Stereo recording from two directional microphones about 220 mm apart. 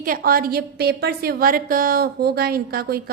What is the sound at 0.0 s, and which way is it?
A woman's voice, 40° right (ahead or behind).